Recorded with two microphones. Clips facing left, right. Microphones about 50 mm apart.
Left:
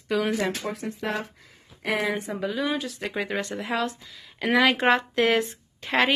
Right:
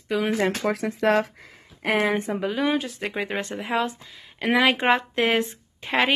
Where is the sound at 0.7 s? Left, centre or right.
Right.